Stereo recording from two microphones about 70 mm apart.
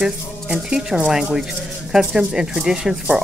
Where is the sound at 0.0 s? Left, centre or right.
Centre.